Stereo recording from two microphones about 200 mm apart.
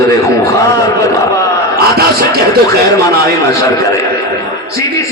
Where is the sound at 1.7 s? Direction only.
50° right (ahead or behind).